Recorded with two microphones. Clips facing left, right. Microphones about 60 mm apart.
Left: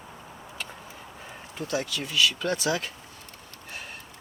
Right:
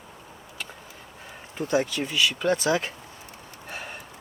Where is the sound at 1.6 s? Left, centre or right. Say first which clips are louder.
Right 5 dB; right.